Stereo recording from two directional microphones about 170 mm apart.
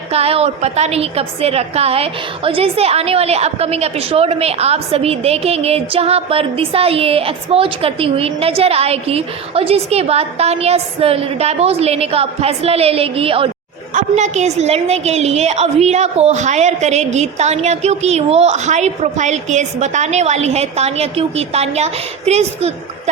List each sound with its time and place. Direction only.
0.1 s a woman's voice: 35° right (ahead or behind)